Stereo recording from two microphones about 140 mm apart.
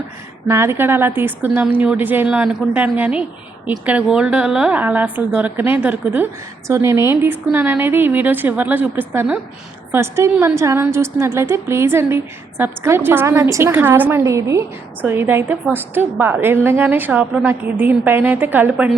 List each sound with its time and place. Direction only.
0.4 s a woman's voice: 20° right (ahead or behind)